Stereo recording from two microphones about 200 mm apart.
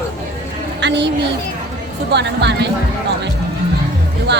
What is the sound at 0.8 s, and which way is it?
A woman's voice, 60° right (ahead or behind).